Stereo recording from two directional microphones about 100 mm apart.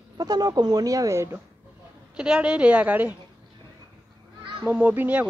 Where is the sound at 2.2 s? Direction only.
10° right (ahead or behind).